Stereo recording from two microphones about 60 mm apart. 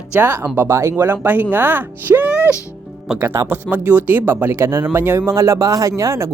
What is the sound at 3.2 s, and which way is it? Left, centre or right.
Speech, right.